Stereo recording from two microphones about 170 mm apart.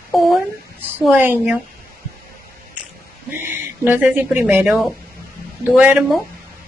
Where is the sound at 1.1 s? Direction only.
10° right (ahead or behind).